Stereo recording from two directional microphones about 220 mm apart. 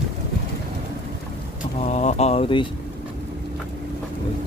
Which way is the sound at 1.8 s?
30° left (ahead or behind).